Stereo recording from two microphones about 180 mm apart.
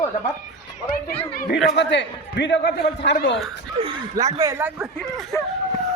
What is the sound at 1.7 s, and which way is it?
A man's voice, 80° left.